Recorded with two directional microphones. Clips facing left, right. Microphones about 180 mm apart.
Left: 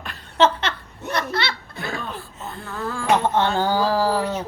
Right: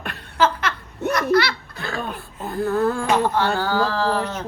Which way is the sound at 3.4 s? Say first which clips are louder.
Left 1 dB; 20° left (ahead or behind).